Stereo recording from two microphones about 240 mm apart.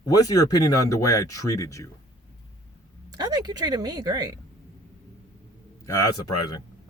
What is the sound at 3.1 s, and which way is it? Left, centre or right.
Speech, centre.